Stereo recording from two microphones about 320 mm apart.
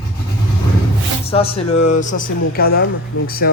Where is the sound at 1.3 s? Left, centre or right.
Centre.